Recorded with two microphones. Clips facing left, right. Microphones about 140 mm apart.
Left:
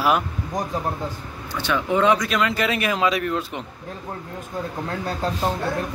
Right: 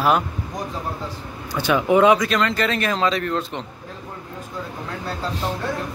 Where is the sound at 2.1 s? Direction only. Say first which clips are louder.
Right 2 dB; centre (ahead or behind).